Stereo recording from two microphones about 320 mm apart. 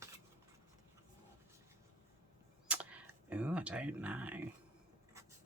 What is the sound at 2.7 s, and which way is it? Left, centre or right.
Speech, centre.